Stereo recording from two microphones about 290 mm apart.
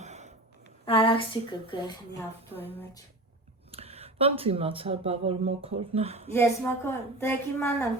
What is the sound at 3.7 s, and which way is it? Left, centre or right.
Speech, right.